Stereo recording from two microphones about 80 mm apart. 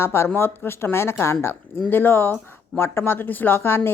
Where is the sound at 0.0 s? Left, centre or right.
Left.